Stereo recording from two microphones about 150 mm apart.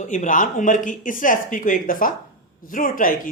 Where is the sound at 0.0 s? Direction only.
55° left (ahead or behind).